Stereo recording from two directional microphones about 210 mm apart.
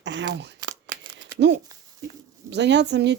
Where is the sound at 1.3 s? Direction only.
55° right (ahead or behind).